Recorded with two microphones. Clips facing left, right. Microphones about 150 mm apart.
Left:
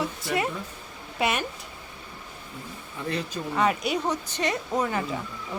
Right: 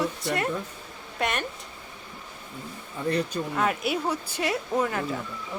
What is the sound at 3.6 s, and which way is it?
A woman's voice, centre (ahead or behind).